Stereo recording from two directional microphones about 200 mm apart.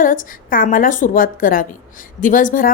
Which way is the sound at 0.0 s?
40° left (ahead or behind).